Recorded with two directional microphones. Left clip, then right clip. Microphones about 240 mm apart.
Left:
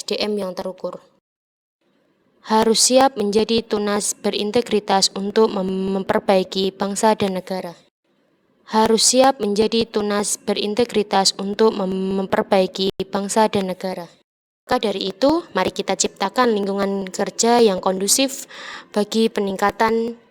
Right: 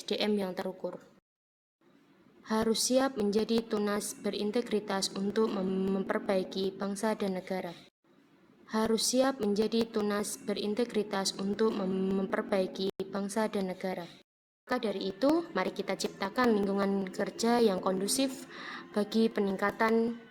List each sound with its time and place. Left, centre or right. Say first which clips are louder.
0.0 s a woman's voice: left 9 dB; left
2.4 s speech: left 14 dB; left